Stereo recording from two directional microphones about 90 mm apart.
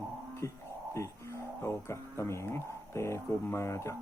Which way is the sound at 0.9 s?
30° left (ahead or behind).